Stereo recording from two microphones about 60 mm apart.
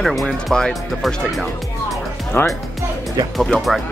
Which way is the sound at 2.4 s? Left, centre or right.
Left.